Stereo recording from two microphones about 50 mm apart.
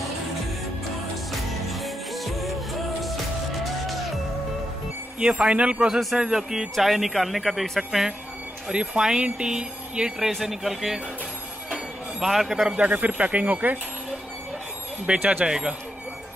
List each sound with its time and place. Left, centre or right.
1.3 s music: centre
5.2 s speech: right
5.9 s speech: centre
6.1 s speech: centre
8.7 s speech: centre
10.2 s speech: centre
12.2 s speech: centre
12.7 s speech: right
15.1 s speech: right